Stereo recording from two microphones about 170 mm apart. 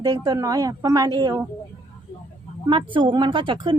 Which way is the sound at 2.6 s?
30° right (ahead or behind).